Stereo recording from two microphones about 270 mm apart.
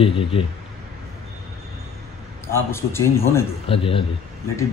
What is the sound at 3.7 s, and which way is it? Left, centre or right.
Speech, centre.